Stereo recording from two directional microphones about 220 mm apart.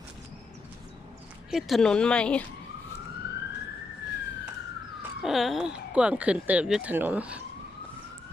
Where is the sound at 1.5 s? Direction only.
Centre (ahead or behind).